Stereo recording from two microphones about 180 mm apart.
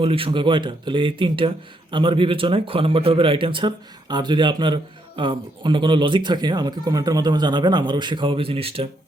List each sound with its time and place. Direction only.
0.0 s a man's voice: 30° right (ahead or behind)